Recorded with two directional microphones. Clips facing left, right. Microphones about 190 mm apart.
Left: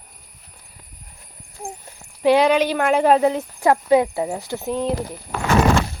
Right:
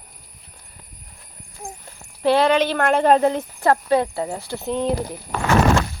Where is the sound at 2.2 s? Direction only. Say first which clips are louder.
Left 1 dB; 15° left (ahead or behind).